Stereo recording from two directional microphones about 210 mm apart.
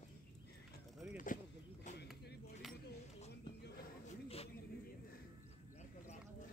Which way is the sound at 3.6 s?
45° left (ahead or behind).